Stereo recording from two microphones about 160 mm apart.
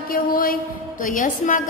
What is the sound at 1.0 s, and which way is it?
Speech, 55° left (ahead or behind).